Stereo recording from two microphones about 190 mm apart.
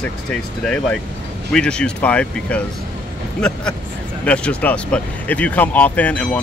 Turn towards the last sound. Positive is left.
turn(degrees=5)  # may be behind; listen again after turning